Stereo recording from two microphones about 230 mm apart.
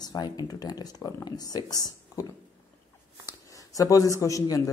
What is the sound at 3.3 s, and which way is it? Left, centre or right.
Speech, centre.